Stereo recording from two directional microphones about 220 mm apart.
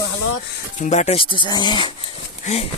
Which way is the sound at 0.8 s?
30° left (ahead or behind).